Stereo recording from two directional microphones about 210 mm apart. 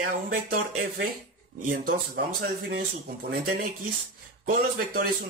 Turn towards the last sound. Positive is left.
turn(degrees=-45)  # may be behind; listen again after turning